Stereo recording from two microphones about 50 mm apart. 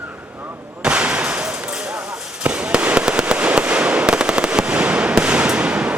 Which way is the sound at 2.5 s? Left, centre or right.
Centre.